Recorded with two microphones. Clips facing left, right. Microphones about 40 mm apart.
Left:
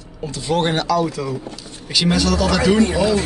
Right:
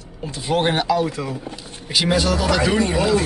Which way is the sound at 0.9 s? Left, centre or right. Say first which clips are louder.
Left 2 dB; right.